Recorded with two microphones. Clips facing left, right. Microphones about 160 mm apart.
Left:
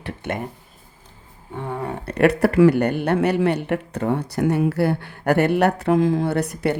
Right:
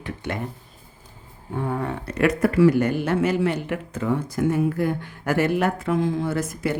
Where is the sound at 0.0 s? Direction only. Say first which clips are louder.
Left 2 dB; 55° left (ahead or behind).